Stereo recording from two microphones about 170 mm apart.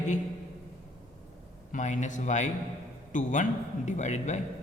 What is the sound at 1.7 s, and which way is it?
A man's voice, 45° left (ahead or behind).